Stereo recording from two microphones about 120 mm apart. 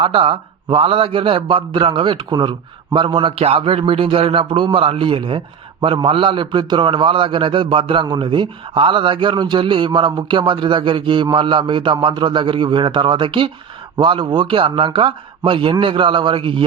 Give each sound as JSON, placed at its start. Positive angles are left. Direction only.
{"t": 0.0, "sound": "a man's voice", "side_deg": -50}